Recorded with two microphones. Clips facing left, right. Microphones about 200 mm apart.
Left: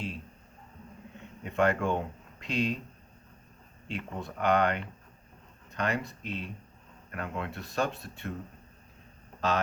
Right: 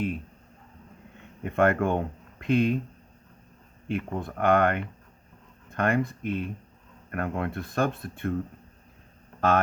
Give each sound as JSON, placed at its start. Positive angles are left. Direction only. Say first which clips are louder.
{"t": 1.5, "sound": "speech", "louder": "right 4 dB", "side_deg": -55}
{"t": 3.8, "sound": "speech", "louder": "right 7 dB", "side_deg": -55}
{"t": 9.4, "sound": "speech", "louder": "right 6 dB", "side_deg": -55}